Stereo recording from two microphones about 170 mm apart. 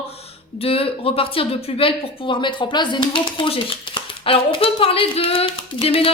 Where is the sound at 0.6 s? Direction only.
35° left (ahead or behind).